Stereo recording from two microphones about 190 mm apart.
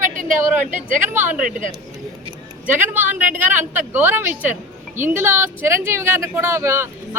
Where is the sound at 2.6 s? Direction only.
10° right (ahead or behind).